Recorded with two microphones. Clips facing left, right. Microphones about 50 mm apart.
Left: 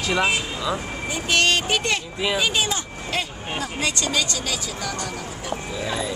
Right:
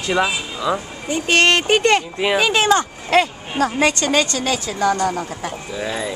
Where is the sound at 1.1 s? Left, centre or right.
Right.